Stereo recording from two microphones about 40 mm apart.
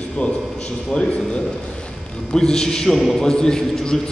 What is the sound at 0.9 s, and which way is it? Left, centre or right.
Speech, left.